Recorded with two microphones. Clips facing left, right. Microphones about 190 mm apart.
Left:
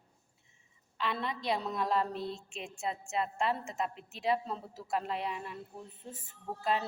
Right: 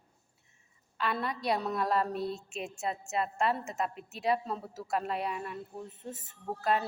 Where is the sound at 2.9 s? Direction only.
55° right (ahead or behind).